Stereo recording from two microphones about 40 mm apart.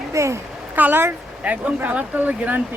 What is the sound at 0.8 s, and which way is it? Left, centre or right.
Speech, right.